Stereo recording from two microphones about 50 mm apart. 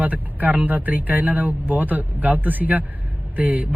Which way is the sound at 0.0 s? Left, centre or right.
Right.